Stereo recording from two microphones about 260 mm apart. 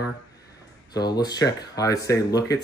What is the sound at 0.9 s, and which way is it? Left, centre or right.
Speech, centre.